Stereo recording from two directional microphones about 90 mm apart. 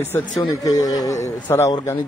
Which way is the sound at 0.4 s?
40° left (ahead or behind).